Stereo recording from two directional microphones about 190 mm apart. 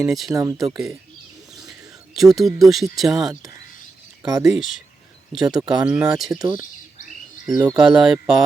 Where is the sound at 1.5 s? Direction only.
20° right (ahead or behind).